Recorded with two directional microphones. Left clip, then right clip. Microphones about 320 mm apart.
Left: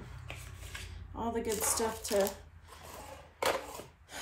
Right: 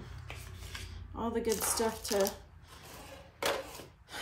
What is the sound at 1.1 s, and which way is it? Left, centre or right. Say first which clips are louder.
Speech: right 1 dB; centre.